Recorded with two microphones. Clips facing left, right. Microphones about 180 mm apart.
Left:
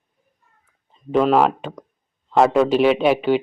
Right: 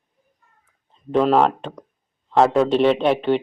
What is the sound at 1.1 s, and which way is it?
Speech, 5° left (ahead or behind).